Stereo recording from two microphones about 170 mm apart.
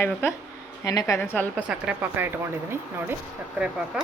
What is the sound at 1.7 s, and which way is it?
Speech, 10° right (ahead or behind).